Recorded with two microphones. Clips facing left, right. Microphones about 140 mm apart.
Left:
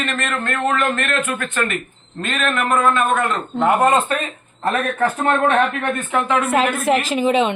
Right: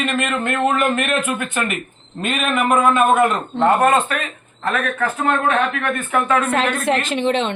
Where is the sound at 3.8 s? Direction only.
25° left (ahead or behind).